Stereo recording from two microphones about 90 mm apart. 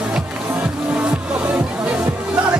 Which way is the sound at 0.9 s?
10° right (ahead or behind).